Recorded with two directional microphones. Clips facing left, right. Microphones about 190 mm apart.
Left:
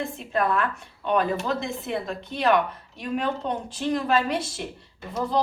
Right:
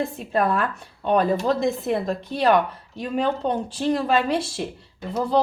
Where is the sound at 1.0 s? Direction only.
35° right (ahead or behind).